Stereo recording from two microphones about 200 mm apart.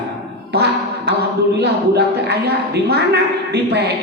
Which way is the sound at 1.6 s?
55° right (ahead or behind).